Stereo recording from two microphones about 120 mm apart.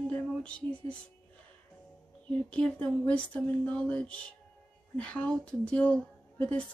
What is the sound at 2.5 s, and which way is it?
Speech, 10° left (ahead or behind).